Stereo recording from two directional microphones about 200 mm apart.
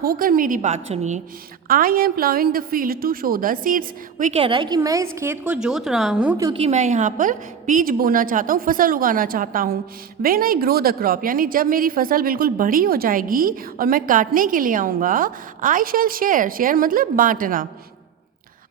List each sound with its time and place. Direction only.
0.0 s a woman's voice: 45° right (ahead or behind); by 6.3 s 5° right (ahead or behind)
6.3 s a woman's voice: 15° right (ahead or behind)
6.6 s a woman's voice: 35° right (ahead or behind)